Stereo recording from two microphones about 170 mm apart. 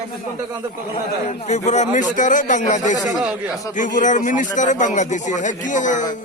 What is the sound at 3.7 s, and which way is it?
Speech, 50° left (ahead or behind).